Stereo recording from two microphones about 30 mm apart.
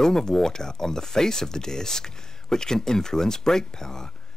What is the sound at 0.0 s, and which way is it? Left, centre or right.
Speech, centre.